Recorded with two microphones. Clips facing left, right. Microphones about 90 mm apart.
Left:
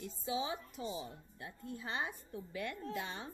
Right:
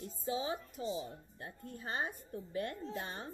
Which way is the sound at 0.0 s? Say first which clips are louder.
Right 1 dB; 45° right (ahead or behind).